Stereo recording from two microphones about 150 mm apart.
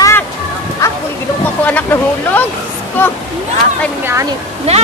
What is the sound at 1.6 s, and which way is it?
Speech, 10° left (ahead or behind).